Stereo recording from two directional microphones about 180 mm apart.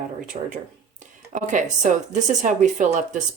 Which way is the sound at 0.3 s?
45° right (ahead or behind).